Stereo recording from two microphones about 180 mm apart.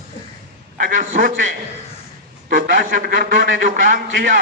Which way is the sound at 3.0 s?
50° right (ahead or behind).